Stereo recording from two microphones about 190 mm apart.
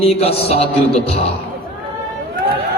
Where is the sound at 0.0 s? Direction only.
30° left (ahead or behind).